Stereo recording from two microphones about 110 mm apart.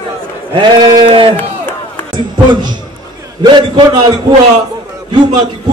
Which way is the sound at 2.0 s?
40° right (ahead or behind).